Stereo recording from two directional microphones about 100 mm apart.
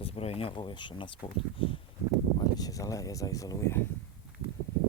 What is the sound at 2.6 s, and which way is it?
Speech, 35° left (ahead or behind).